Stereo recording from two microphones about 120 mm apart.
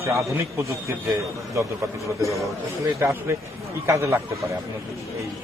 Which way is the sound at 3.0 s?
20° right (ahead or behind).